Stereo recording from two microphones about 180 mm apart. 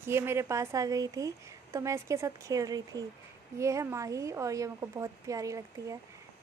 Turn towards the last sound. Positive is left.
turn(degrees=-20)  # may be behind; listen again after turning